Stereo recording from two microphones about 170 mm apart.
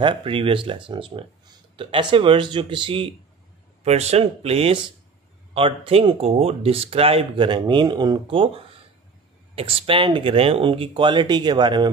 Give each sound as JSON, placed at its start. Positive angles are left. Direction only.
{"t": 0.0, "sound": "speech", "side_deg": -30}